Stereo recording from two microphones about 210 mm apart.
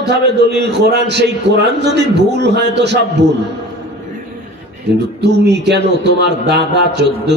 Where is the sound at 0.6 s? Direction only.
55° right (ahead or behind).